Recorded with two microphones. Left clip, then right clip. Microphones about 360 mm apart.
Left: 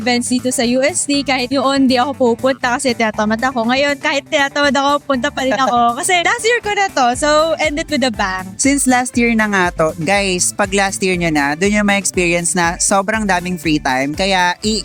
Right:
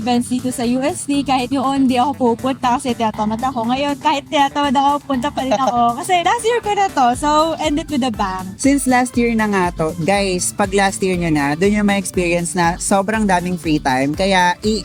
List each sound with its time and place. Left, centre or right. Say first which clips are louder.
0.0 s speech: left 3 dB; left
5.5 s speech: left 1 dB; centre
5.7 s speech: left 2 dB; left